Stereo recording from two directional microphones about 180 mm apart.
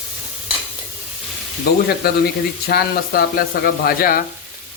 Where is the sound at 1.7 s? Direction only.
60° left (ahead or behind).